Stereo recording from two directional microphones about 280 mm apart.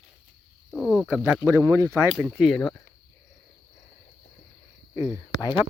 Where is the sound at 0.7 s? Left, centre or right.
Centre.